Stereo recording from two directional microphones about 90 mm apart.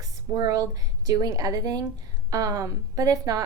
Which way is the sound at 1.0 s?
45° right (ahead or behind).